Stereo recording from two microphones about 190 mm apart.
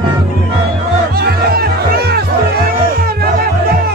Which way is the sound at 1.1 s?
55° right (ahead or behind).